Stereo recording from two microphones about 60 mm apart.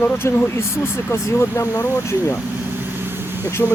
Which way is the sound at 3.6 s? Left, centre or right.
Left.